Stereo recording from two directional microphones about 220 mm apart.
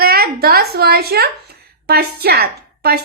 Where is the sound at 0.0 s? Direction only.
45° right (ahead or behind).